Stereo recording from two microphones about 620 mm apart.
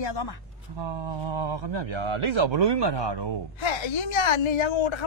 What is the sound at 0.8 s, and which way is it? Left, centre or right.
Speech, right.